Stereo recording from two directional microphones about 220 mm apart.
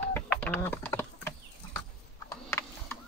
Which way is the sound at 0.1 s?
10° left (ahead or behind).